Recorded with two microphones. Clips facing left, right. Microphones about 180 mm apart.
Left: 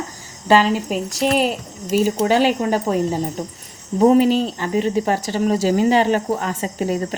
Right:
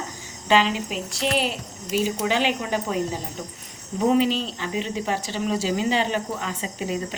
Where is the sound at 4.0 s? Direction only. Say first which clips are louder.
Left 7 dB; 45° left (ahead or behind).